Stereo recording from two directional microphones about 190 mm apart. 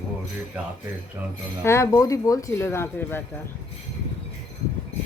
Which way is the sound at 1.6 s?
15° left (ahead or behind).